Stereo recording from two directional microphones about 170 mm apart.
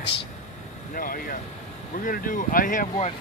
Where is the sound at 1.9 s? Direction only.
55° left (ahead or behind).